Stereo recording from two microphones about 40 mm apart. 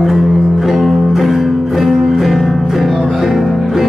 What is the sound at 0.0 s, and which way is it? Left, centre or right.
Music, centre.